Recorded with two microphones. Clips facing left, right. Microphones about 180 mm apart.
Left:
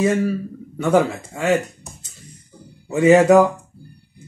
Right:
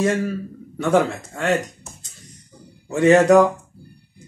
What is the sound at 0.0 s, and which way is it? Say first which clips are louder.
Speech: left 2 dB; centre (ahead or behind).